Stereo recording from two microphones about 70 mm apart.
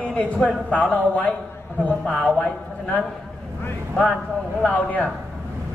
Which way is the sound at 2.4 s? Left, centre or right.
Centre.